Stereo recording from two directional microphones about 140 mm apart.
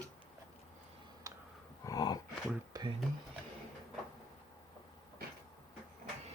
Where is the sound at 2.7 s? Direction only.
25° right (ahead or behind).